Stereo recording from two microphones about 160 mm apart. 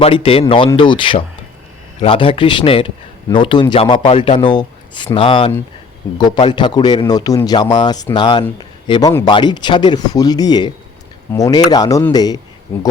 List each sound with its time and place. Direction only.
0.0 s speech: 35° left (ahead or behind)